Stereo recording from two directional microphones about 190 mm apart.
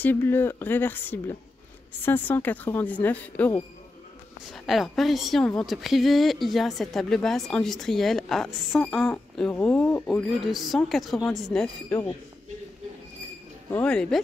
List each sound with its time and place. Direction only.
0.0 s a woman's voice: 10° left (ahead or behind)
4.6 s speech: centre (ahead or behind)
13.7 s speech: 5° left (ahead or behind)